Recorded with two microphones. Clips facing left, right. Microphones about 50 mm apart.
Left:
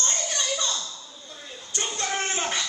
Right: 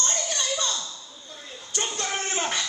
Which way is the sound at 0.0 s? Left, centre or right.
Left.